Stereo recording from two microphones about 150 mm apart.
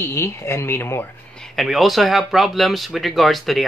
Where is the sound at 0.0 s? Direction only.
15° left (ahead or behind).